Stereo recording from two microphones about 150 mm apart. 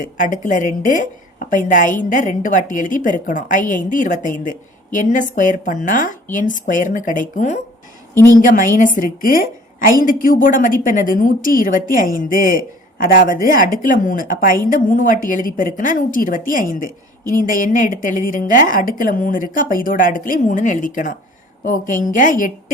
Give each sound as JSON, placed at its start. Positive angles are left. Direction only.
{"t": 0.0, "sound": "a woman's voice", "side_deg": 60}